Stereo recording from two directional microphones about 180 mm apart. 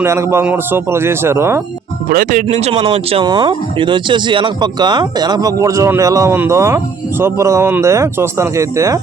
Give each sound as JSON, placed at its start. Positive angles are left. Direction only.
{"t": 0.0, "sound": "a man's voice", "side_deg": -15}
{"t": 2.0, "sound": "speech", "side_deg": -50}